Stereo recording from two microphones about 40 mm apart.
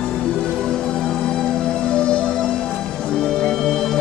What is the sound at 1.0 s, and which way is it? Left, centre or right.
Music, left.